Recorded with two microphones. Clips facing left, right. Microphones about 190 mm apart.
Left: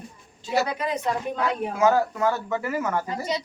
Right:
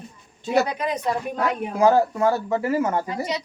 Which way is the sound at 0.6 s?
15° right (ahead or behind).